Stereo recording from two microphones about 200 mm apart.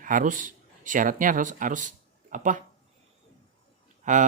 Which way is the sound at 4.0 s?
40° right (ahead or behind).